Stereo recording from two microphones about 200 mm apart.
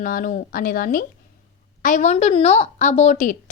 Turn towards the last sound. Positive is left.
turn(degrees=35)  # may be behind; listen again after turning